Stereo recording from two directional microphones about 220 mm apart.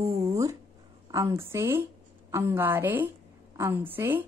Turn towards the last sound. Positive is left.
turn(degrees=-10)  # may be behind; listen again after turning